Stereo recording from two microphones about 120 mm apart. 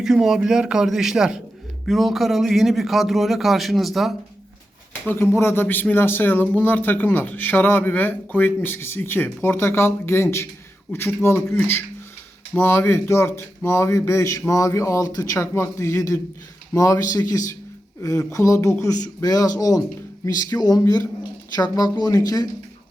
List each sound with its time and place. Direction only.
0.0 s a man's voice: 5° right (ahead or behind)
5.0 s speech: 20° left (ahead or behind)